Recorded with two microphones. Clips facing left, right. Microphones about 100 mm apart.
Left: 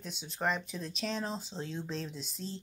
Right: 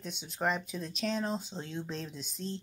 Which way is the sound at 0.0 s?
Centre (ahead or behind).